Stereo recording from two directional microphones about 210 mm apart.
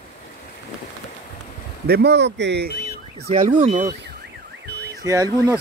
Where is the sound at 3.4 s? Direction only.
40° right (ahead or behind).